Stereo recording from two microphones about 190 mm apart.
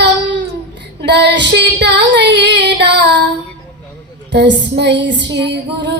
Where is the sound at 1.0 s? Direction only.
60° right (ahead or behind).